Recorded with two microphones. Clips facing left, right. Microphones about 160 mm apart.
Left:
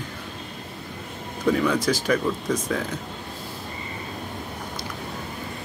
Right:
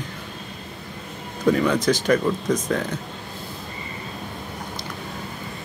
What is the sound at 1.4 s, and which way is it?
Speech, 5° right (ahead or behind).